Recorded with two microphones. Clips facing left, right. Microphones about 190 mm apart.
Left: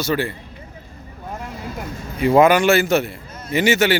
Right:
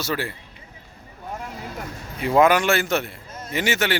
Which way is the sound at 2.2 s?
Centre (ahead or behind).